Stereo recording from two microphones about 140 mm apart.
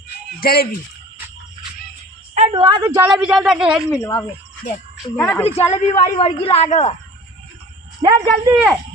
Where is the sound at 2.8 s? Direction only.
15° right (ahead or behind).